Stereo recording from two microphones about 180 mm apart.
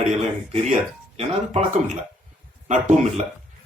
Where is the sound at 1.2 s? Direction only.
35° right (ahead or behind).